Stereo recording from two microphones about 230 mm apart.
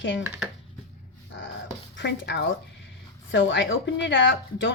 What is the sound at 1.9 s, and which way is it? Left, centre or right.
A woman's voice, left.